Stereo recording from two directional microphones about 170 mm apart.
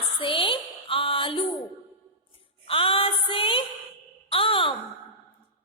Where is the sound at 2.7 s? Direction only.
30° left (ahead or behind).